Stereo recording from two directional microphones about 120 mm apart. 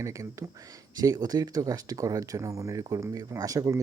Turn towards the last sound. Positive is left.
turn(degrees=-30)  # may be behind; listen again after turning